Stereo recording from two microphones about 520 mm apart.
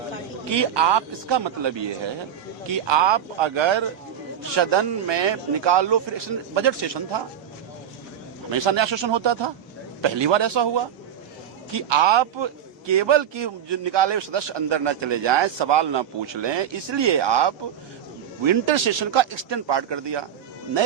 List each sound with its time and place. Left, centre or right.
0.5 s a man's voice: right
8.4 s a man's voice: right